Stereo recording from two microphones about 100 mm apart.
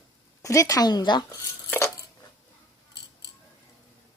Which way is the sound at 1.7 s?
25° left (ahead or behind).